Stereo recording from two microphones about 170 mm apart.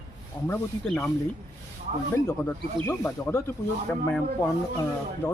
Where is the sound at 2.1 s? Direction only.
15° left (ahead or behind).